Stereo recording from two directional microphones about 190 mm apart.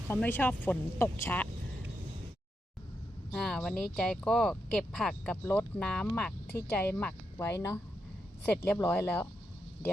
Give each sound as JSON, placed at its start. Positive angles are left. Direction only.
{"t": 0.1, "sound": "speech", "side_deg": 10}
{"t": 3.3, "sound": "speech", "side_deg": 0}